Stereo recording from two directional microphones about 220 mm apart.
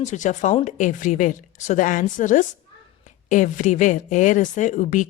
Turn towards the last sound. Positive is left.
turn(degrees=35)  # may be behind; listen again after turning